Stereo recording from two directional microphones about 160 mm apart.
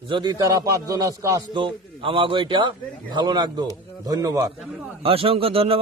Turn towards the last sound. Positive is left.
turn(degrees=-35)  # may be behind; listen again after turning